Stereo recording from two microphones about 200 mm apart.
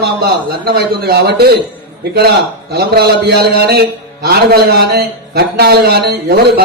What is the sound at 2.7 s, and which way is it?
Music, 55° right (ahead or behind).